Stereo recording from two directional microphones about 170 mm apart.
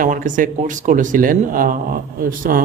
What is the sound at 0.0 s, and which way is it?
Speech, 50° right (ahead or behind).